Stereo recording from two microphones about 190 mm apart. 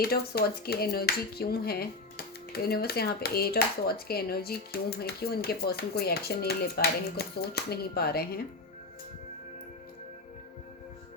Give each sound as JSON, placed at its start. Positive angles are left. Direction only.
{"t": 0.0, "sound": "speech", "side_deg": 55}